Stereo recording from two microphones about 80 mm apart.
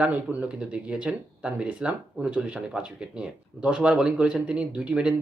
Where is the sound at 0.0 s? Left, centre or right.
Centre.